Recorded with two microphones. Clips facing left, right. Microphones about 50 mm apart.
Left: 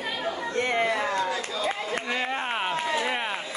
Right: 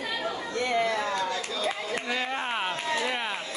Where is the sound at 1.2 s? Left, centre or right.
Centre.